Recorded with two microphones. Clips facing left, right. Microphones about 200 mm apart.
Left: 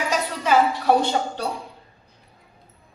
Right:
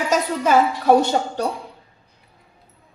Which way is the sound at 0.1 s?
45° right (ahead or behind).